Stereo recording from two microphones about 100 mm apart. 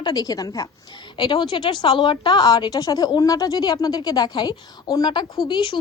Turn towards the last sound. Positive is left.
turn(degrees=55)  # may be behind; listen again after turning